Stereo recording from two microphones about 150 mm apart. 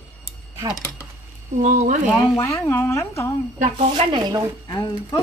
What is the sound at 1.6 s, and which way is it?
Speech, 50° right (ahead or behind).